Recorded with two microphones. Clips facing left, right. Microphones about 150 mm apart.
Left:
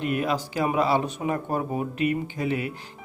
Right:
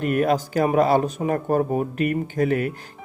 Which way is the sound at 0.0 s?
50° right (ahead or behind).